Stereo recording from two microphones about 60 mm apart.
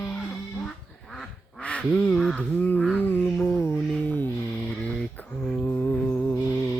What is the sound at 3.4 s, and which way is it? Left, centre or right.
Music, left.